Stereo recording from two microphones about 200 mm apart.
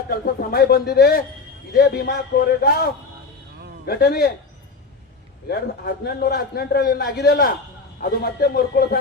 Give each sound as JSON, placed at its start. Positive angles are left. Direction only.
{"t": 0.1, "sound": "a man's voice", "side_deg": 50}
{"t": 5.5, "sound": "a man's voice", "side_deg": 50}